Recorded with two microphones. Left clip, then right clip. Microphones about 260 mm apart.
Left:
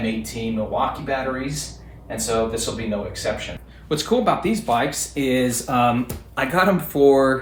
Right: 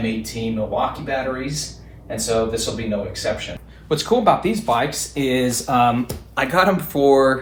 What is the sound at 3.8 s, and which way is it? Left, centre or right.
Speech, centre.